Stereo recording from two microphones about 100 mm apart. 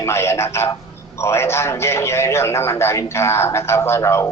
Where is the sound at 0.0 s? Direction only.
25° left (ahead or behind).